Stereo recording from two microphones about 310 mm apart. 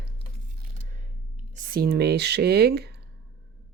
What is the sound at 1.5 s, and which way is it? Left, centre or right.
Speech, right.